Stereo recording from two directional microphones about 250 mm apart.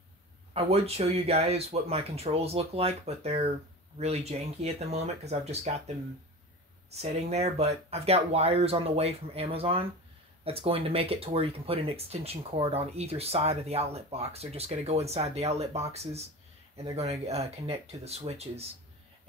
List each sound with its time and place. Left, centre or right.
0.5 s speech: right
6.9 s speech: right
17.3 s speech: right